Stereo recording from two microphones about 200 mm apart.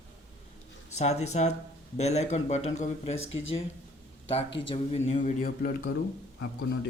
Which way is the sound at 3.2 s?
75° left (ahead or behind).